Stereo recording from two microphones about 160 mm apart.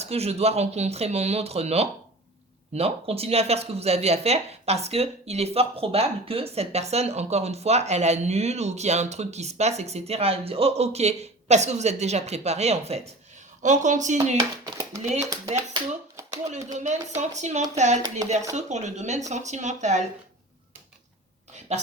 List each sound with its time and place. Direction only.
0.0 s speech: 40° right (ahead or behind)
16.7 s speech: 45° right (ahead or behind)